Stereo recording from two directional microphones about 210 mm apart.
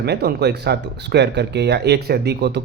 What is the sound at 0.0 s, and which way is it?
A man's voice, 50° right (ahead or behind).